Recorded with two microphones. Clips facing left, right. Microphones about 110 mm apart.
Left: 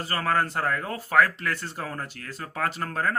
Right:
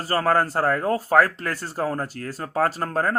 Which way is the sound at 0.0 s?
35° right (ahead or behind).